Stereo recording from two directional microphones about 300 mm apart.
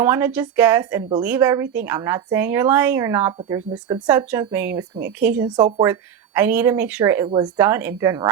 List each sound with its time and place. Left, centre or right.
0.0 s a woman's voice: centre